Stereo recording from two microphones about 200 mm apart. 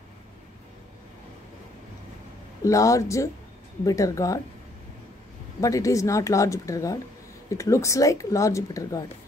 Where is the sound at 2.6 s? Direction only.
15° left (ahead or behind).